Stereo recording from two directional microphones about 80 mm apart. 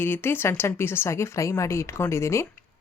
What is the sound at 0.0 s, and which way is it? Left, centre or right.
Speech, left.